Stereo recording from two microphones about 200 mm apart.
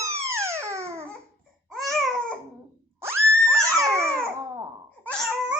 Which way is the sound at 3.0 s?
10° right (ahead or behind).